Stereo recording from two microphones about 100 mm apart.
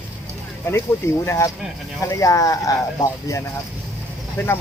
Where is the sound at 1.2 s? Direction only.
30° left (ahead or behind).